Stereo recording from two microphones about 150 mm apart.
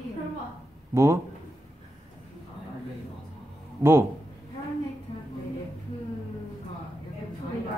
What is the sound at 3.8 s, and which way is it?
Speech, 15° right (ahead or behind).